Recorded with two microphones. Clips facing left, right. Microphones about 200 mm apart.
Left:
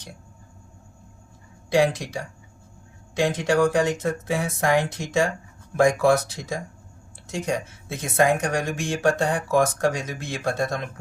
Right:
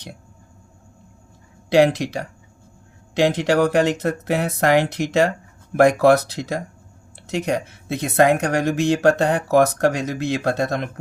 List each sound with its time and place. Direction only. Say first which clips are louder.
2.0 s speech: right 6 dB; 65° right (ahead or behind)